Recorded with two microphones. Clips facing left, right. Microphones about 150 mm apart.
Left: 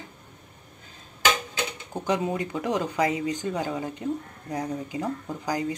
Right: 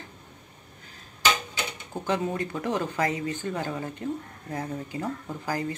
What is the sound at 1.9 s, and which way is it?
Speech, 15° left (ahead or behind).